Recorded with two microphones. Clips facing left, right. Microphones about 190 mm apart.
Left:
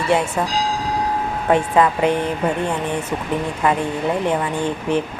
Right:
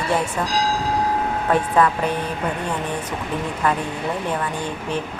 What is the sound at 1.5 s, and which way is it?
Speech, 20° left (ahead or behind).